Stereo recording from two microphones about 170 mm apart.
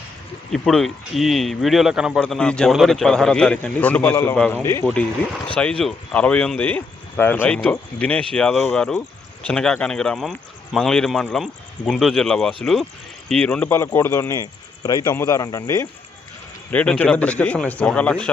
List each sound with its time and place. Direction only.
0.5 s a man's voice: centre (ahead or behind); by 15.9 s 20° left (ahead or behind)
16.7 s speech: 10° left (ahead or behind)